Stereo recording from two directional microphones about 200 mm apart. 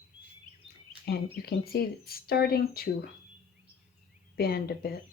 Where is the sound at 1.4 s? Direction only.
50° left (ahead or behind).